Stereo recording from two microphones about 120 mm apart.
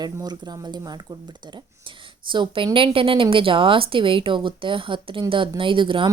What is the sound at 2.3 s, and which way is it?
A woman's voice, 40° right (ahead or behind).